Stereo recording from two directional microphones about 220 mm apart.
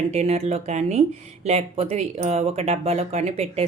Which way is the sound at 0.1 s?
30° right (ahead or behind).